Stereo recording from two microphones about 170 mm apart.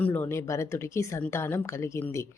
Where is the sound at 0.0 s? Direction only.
10° left (ahead or behind).